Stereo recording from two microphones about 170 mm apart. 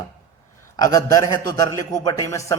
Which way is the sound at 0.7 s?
20° left (ahead or behind).